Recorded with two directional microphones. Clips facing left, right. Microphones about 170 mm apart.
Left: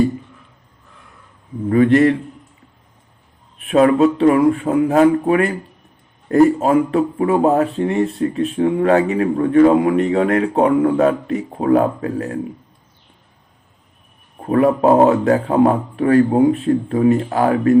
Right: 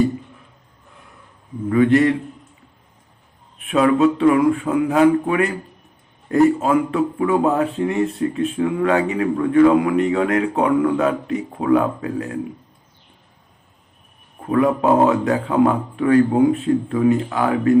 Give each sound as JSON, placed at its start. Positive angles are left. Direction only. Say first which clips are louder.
{"t": 1.7, "sound": "a man's voice", "louder": "left 2 dB", "side_deg": 35}
{"t": 3.7, "sound": "a man's voice", "louder": "left 3 dB", "side_deg": 40}
{"t": 14.4, "sound": "a man's voice", "louder": "left 3 dB", "side_deg": 35}